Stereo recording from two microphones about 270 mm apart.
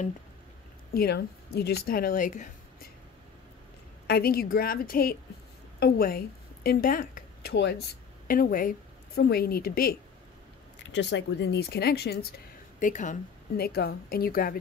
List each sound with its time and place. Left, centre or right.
0.9 s speech: left
4.1 s a woman's voice: left